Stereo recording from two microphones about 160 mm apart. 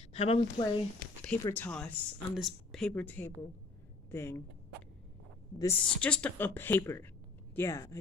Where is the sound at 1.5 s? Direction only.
10° left (ahead or behind).